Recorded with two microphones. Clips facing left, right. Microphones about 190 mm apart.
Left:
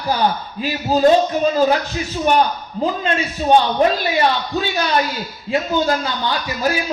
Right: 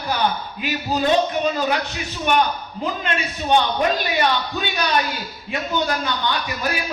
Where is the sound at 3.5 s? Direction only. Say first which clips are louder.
Left 4 dB; 30° left (ahead or behind).